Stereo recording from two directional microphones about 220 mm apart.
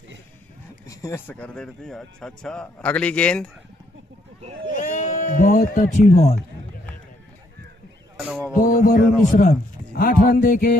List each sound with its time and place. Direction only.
0.8 s speech: 15° left (ahead or behind)
4.9 s speech: 35° left (ahead or behind)
8.5 s a man's voice: 40° left (ahead or behind)